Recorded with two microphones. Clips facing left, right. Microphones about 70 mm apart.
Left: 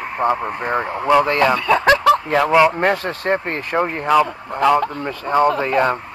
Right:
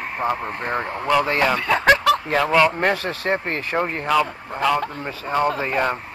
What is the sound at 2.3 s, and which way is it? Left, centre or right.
Speech, centre.